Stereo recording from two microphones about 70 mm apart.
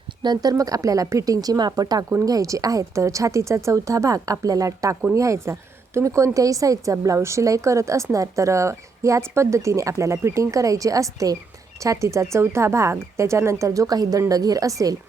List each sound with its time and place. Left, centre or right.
0.2 s speech: right
0.5 s a woman's voice: right